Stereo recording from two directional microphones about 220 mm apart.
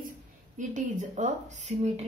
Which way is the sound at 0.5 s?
35° right (ahead or behind).